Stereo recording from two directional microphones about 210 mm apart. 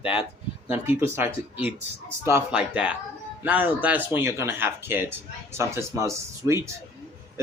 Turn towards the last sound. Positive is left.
turn(degrees=-15)  # may be behind; listen again after turning